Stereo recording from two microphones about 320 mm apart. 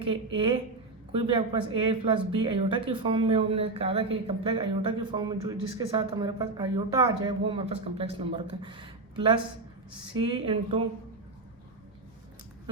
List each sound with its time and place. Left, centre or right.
0.1 s a woman's voice: centre